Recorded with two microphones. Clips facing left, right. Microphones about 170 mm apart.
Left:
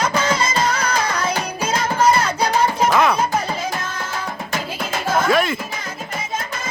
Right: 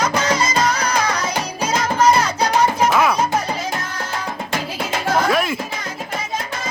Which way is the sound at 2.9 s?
5° right (ahead or behind).